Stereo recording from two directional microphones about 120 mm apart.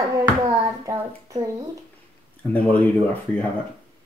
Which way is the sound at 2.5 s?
15° left (ahead or behind).